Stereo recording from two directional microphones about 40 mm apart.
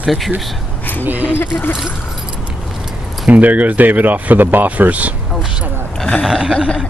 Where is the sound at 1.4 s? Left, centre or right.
Left.